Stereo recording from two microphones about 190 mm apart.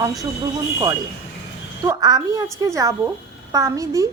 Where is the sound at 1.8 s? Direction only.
20° right (ahead or behind).